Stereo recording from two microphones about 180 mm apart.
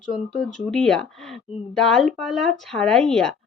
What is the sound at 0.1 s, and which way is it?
Speech, 5° left (ahead or behind).